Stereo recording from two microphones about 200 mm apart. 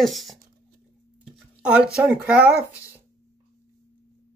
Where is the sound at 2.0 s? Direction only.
5° right (ahead or behind).